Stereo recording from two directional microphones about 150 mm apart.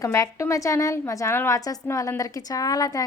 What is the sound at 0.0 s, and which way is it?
A woman's voice, 20° left (ahead or behind).